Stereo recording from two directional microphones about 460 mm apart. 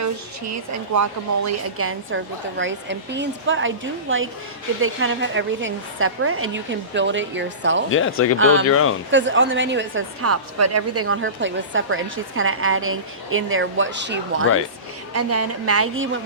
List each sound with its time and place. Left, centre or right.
1.5 s a woman's voice: right
4.8 s a woman's voice: right
7.9 s speech: left
8.4 s a woman's voice: right
8.7 s speech: left
9.0 s a woman's voice: right